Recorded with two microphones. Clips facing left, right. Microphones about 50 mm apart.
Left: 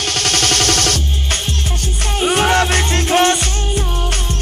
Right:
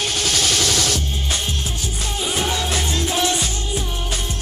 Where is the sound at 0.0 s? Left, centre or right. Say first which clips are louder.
Left 3 dB; left.